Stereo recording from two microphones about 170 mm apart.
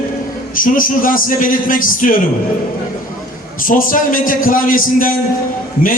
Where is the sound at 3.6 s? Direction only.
50° left (ahead or behind).